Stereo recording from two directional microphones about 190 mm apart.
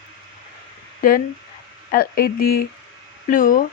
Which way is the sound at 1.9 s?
50° left (ahead or behind).